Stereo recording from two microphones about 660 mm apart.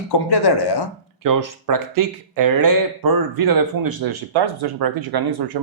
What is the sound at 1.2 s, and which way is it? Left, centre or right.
Speech, right.